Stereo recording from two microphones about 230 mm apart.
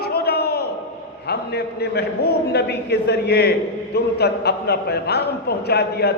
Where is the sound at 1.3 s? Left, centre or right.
Left.